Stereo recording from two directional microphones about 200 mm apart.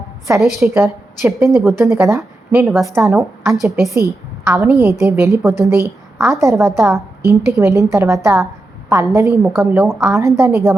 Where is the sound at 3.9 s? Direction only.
15° right (ahead or behind).